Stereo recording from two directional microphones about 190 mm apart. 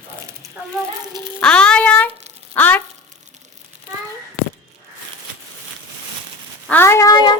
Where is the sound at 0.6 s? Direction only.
5° right (ahead or behind).